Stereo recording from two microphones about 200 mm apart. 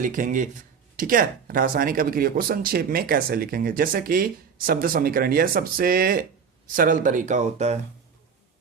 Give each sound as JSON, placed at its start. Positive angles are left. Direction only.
{"t": 0.0, "sound": "speech", "side_deg": -40}